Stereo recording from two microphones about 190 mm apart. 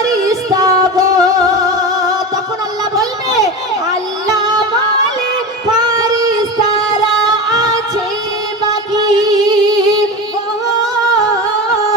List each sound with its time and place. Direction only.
0.0 s music: 15° right (ahead or behind)
2.9 s a sound: 20° right (ahead or behind)
4.3 s music: 20° right (ahead or behind)
6.0 s music: 20° right (ahead or behind)
8.9 s music: 20° right (ahead or behind)